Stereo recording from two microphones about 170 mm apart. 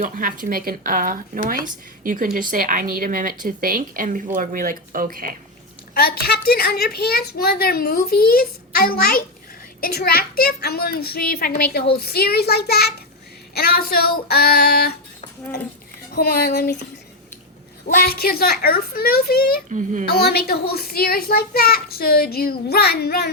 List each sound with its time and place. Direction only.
0.0 s a woman's voice: 55° right (ahead or behind)
5.9 s a woman's voice: 65° left (ahead or behind)
16.1 s a child's voice: 65° left (ahead or behind)
17.8 s a woman's voice: 65° left (ahead or behind)
19.7 s a woman's voice: 45° right (ahead or behind)
20.1 s a woman's voice: 70° left (ahead or behind)